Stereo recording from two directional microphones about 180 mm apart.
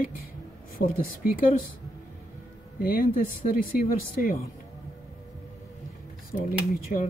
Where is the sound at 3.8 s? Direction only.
55° left (ahead or behind).